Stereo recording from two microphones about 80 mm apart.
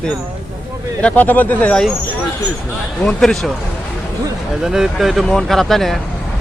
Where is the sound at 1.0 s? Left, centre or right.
Left.